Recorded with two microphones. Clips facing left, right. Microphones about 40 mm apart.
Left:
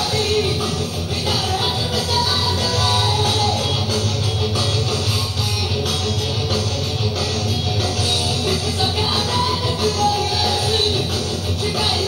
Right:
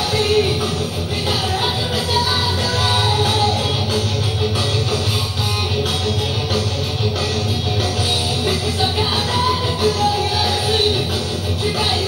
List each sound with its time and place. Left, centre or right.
2.8 s music: right
9.3 s music: centre